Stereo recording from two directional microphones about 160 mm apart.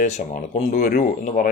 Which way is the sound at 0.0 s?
50° left (ahead or behind).